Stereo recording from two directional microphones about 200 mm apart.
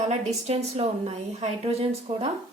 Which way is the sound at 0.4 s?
30° right (ahead or behind).